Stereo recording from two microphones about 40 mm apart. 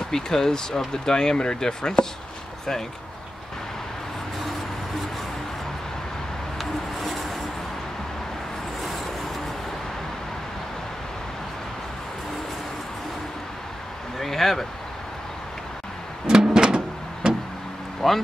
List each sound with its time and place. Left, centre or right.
0.1 s speech: centre
6.6 s a sound: centre
14.2 s speech: centre
16.3 s music: centre
18.0 s speech: centre